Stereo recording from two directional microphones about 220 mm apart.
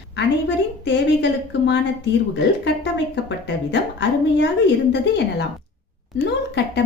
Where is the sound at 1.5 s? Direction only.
50° left (ahead or behind).